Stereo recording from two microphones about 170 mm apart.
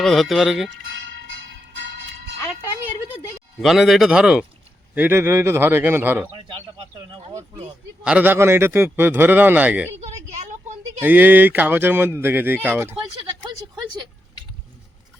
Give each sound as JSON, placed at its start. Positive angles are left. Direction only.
{"t": 0.0, "sound": "a man's voice", "side_deg": 0}
{"t": 0.9, "sound": "church bell", "side_deg": -90}
{"t": 3.6, "sound": "a man's voice", "side_deg": 0}
{"t": 6.3, "sound": "speech", "side_deg": -30}
{"t": 8.0, "sound": "speech", "side_deg": -10}
{"t": 10.4, "sound": "a sound", "side_deg": -45}
{"t": 11.0, "sound": "speech", "side_deg": -10}